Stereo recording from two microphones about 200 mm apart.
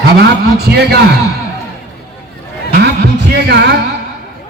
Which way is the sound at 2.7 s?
50° right (ahead or behind).